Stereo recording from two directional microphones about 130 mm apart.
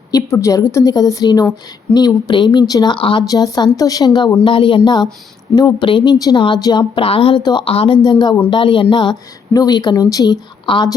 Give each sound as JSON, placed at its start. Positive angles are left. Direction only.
{"t": 0.1, "sound": "a woman's voice", "side_deg": 25}
{"t": 3.2, "sound": "a woman's voice", "side_deg": 30}
{"t": 10.7, "sound": "a woman's voice", "side_deg": 40}